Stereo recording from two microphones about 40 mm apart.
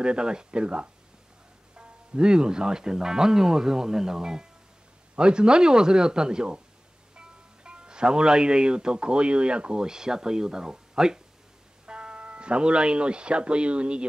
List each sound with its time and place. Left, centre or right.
0.0 s speech: right